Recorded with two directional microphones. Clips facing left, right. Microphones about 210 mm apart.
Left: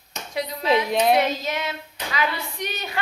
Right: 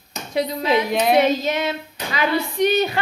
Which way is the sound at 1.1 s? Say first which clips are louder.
Right 5 dB; 25° right (ahead or behind).